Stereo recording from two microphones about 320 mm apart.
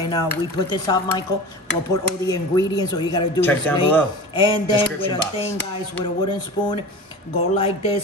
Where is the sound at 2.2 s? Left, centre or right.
Centre.